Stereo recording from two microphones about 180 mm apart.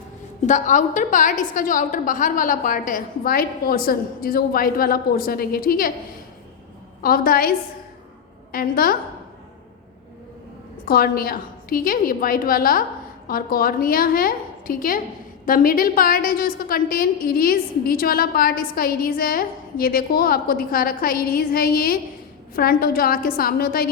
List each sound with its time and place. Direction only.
0.4 s a woman's voice: 45° left (ahead or behind)
7.0 s a woman's voice: 55° left (ahead or behind)
8.5 s a woman's voice: 55° left (ahead or behind)
10.8 s a woman's voice: 55° left (ahead or behind)